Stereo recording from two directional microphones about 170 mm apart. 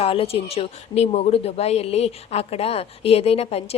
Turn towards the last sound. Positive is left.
turn(degrees=35)  # may be behind; listen again after turning